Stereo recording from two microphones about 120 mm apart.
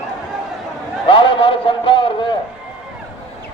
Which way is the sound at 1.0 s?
45° left (ahead or behind).